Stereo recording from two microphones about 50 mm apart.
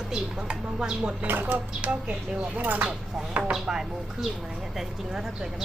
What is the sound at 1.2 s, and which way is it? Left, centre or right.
Chopping, right.